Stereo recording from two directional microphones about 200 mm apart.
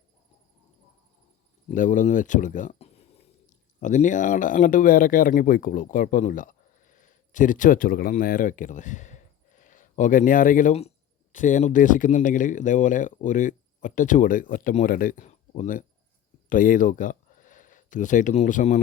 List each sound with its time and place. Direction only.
1.7 s speech: 40° left (ahead or behind)